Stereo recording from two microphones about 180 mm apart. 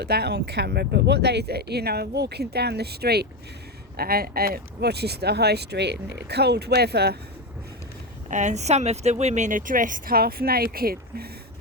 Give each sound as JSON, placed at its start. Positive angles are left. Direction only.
{"t": 0.0, "sound": "speech", "side_deg": -65}
{"t": 8.3, "sound": "speech", "side_deg": -40}